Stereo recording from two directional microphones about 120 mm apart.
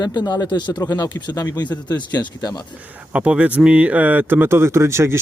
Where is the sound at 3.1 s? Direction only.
10° right (ahead or behind).